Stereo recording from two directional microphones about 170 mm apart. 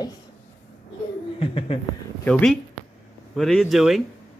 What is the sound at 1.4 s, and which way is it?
Speech, 35° left (ahead or behind).